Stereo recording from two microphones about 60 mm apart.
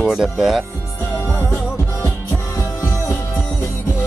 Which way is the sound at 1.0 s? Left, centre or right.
Left.